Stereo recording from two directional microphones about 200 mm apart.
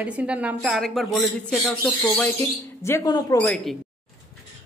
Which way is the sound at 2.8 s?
15° left (ahead or behind).